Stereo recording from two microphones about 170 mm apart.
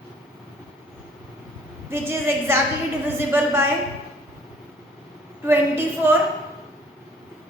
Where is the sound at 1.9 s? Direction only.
15° right (ahead or behind).